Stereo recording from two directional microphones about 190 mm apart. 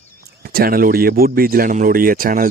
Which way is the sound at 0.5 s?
50° right (ahead or behind).